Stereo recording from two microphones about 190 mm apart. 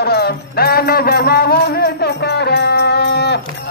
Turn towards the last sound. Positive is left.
turn(degrees=60)  # may be behind; listen again after turning